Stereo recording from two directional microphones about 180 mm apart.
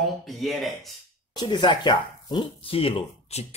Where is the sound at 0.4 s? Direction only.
Centre (ahead or behind).